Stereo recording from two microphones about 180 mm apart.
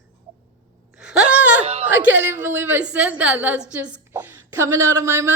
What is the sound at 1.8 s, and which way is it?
A woman's voice, 10° right (ahead or behind).